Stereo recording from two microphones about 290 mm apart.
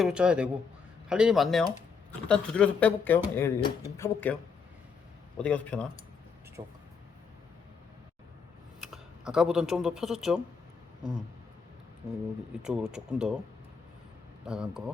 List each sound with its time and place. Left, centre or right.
0.0 s speech: centre
5.4 s speech: centre
6.6 s speech: centre
8.8 s speech: centre
12.6 s speech: centre
14.4 s speech: centre